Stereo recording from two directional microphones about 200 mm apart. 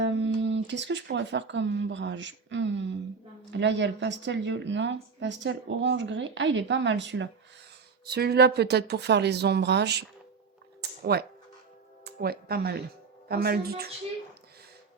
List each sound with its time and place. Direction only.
0.0 s speech: 65° right (ahead or behind)
8.0 s speech: 55° right (ahead or behind)
10.8 s a sound: 50° right (ahead or behind)
12.0 s speech: 50° right (ahead or behind)